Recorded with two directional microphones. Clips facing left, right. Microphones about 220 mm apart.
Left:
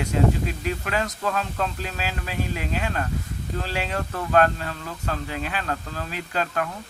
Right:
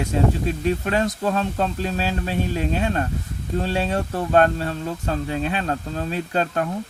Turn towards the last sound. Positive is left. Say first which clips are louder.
# right 4 dB
turn(degrees=-30)  # may be behind; listen again after turning